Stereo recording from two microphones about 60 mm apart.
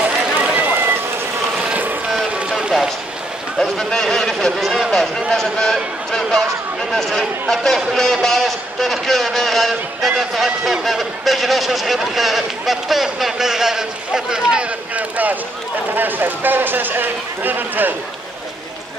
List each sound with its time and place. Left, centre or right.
0.0 s run: right
0.6 s run: right
1.6 s boat: centre
3.5 s a sound: centre
4.9 s a man's voice: centre; by 17.9 s right